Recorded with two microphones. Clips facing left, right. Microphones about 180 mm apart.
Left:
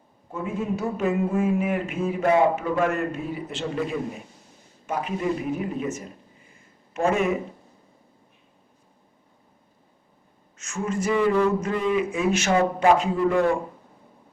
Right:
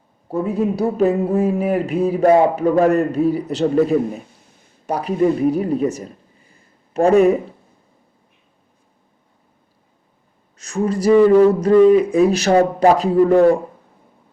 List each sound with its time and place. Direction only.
0.3 s speech: 35° right (ahead or behind)
6.5 s a sound: 35° right (ahead or behind)
10.6 s speech: 35° right (ahead or behind)